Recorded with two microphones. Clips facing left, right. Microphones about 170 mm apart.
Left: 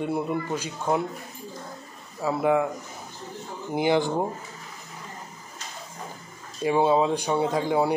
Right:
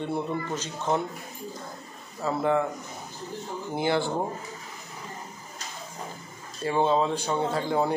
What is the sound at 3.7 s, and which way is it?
Speech, 15° left (ahead or behind).